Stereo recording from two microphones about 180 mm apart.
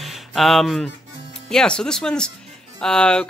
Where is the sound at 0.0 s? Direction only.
Centre (ahead or behind).